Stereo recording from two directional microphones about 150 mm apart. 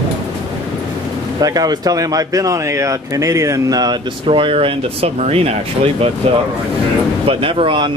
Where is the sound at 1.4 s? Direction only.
25° right (ahead or behind); by 5.9 s 40° right (ahead or behind).